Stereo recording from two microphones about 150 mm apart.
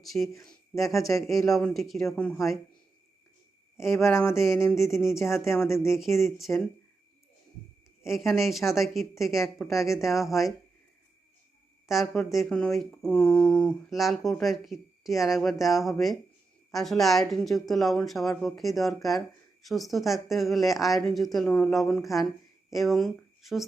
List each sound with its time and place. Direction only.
0.0 s speech: centre (ahead or behind)
3.9 s a sound: 15° left (ahead or behind)
5.1 s speech: centre (ahead or behind)
5.6 s a sound: 20° left (ahead or behind)
6.3 s speech: centre (ahead or behind)
8.0 s speech: centre (ahead or behind)
11.9 s speech: centre (ahead or behind)